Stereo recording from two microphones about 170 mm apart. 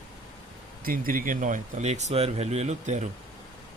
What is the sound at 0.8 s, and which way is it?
Speech, 55° right (ahead or behind).